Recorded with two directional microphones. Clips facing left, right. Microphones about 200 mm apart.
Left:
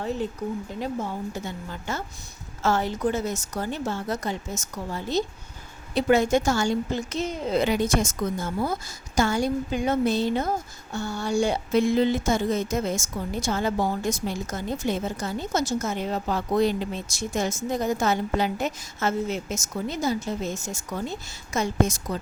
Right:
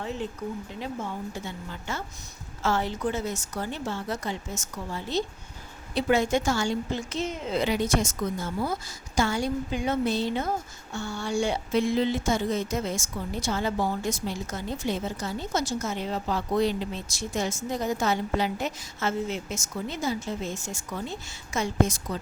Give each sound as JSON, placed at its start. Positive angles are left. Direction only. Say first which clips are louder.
{"t": 1.9, "sound": "a woman's voice", "louder": "left 3 dB", "side_deg": 40}